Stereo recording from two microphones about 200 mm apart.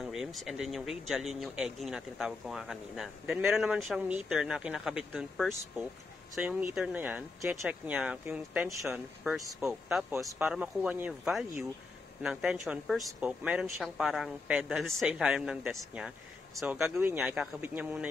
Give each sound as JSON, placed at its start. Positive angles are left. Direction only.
{"t": 0.0, "sound": "speech", "side_deg": 0}